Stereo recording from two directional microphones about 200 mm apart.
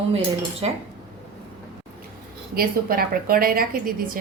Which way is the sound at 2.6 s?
45° right (ahead or behind).